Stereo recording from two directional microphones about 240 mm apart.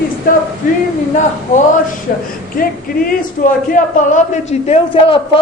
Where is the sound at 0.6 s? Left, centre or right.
Left.